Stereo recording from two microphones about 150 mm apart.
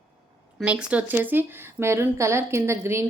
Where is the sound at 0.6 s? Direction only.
5° right (ahead or behind).